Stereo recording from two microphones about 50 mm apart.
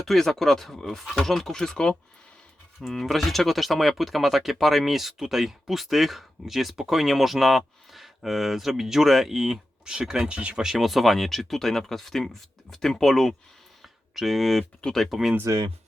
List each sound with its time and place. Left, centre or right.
0.0 s speech: centre
2.8 s speech: centre
9.8 s speech: centre
10.5 s speech: centre
13.8 s a sound: centre
14.9 s speech: centre
15.5 s speech: right